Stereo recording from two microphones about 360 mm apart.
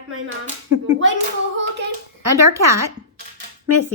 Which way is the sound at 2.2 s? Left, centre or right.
Right.